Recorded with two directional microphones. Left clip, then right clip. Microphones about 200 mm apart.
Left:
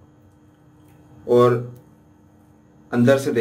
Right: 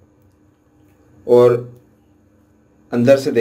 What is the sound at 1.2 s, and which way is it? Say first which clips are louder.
Speech: right 5 dB; 25° right (ahead or behind).